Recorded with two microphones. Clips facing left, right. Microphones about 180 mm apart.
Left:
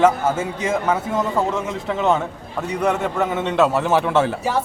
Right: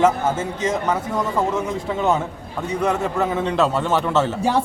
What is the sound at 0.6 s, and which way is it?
Speech, 10° left (ahead or behind).